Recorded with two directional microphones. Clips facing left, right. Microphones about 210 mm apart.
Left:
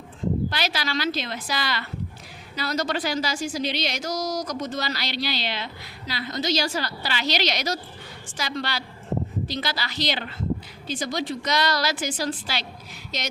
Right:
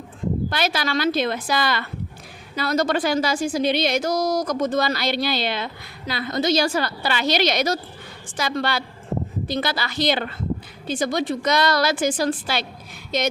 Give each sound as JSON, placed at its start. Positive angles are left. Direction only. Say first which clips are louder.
{"t": 0.5, "sound": "speech", "louder": "right 5 dB", "side_deg": -50}